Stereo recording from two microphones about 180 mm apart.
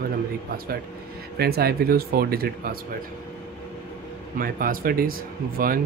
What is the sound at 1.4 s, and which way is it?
Speech, 60° right (ahead or behind).